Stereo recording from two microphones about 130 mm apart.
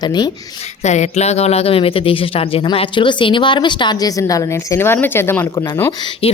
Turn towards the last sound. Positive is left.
turn(degrees=45)  # may be behind; listen again after turning